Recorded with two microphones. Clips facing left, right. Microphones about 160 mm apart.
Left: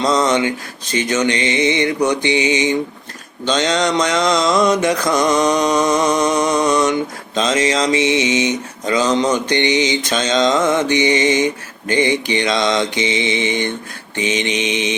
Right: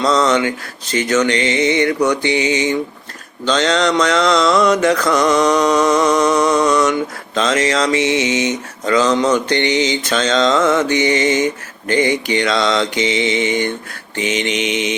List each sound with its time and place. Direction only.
0.0 s mantra: 15° left (ahead or behind)